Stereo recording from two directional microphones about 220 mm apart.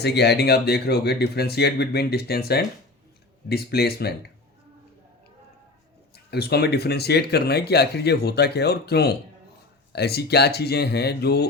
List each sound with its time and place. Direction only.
0.0 s speech: 50° left (ahead or behind)
6.1 s speech: 45° left (ahead or behind)